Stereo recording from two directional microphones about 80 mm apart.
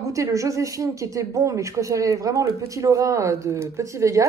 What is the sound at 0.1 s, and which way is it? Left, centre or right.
A woman's voice, right.